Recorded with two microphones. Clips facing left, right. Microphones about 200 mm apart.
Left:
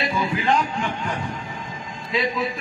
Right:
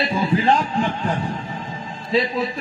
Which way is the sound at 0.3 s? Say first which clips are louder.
Right 5 dB; 35° right (ahead or behind).